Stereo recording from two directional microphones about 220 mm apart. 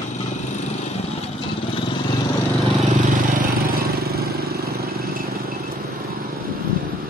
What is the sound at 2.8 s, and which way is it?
Vehicle, 35° right (ahead or behind).